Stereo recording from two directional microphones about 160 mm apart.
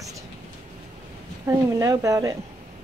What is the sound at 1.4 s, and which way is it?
Speech, 20° right (ahead or behind).